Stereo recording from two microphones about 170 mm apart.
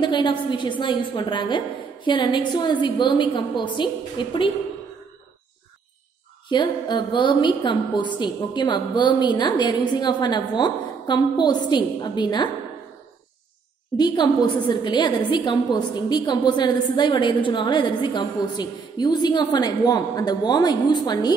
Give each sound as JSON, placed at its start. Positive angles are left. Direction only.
{"t": 0.0, "sound": "a woman's voice", "side_deg": 25}
{"t": 6.5, "sound": "a woman's voice", "side_deg": 25}
{"t": 13.9, "sound": "a woman's voice", "side_deg": 25}